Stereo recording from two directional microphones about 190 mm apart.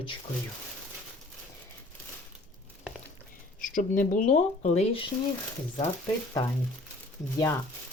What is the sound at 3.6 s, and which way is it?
Speech, 45° left (ahead or behind).